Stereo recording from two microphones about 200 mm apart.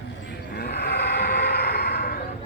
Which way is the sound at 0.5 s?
55° left (ahead or behind).